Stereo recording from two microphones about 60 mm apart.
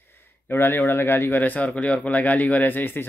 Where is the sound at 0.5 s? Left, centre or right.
Left.